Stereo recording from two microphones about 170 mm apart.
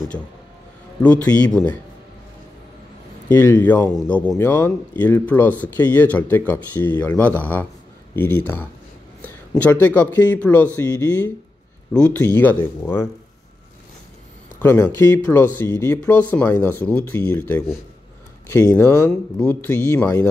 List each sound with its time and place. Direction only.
1.0 s a man's voice: 10° left (ahead or behind)
3.3 s a man's voice: 10° left (ahead or behind)
14.6 s a man's voice: 15° left (ahead or behind)